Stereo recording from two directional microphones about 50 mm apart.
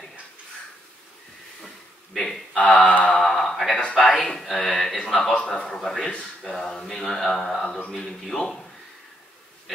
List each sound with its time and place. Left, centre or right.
2.1 s mantra: centre
2.5 s mantra: left
3.2 s a sound: centre
3.9 s speech: centre
4.9 s mantra: centre